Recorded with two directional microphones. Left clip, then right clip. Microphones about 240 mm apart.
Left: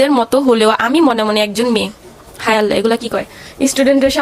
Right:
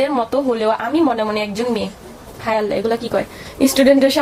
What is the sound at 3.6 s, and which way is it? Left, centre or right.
Speech, centre.